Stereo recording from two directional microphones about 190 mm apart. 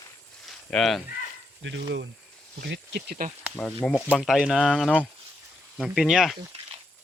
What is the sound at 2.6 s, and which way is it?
Speech, 60° right (ahead or behind).